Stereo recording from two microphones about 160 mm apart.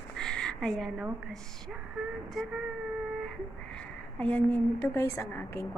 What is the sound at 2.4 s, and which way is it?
Speech, centre (ahead or behind).